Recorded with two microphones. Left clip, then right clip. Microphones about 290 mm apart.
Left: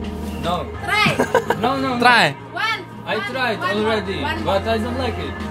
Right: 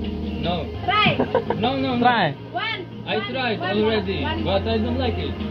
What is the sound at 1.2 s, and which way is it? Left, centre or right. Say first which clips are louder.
A man's voice: left 4 dB; left.